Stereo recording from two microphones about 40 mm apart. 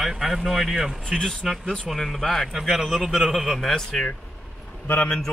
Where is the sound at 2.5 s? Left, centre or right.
Centre.